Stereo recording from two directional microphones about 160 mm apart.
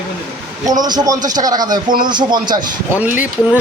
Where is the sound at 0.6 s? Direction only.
25° right (ahead or behind).